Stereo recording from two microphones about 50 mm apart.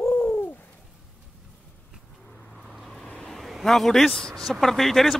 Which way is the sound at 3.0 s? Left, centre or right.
Centre.